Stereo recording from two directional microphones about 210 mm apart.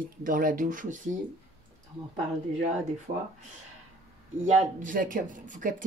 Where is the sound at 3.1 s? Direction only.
40° right (ahead or behind).